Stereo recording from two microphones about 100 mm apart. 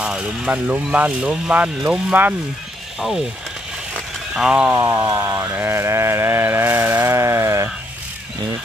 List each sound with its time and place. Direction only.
0.0 s speech: 10° right (ahead or behind)
4.3 s speech: 5° right (ahead or behind)
4.7 s a sound: 35° right (ahead or behind)